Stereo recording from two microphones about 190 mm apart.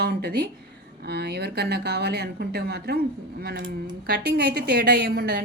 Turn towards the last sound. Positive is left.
turn(degrees=-50)  # may be behind; listen again after turning